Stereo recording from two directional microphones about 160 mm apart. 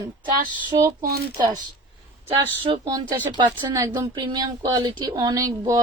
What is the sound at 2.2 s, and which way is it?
Speech, 30° right (ahead or behind).